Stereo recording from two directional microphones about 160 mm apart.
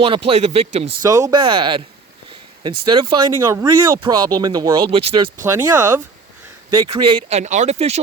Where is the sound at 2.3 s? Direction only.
30° right (ahead or behind).